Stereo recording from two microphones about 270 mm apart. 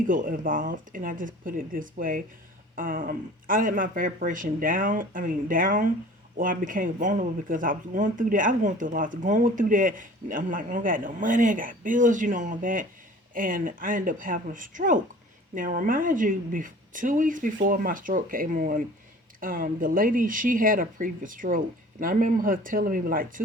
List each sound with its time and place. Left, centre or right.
0.1 s speech: right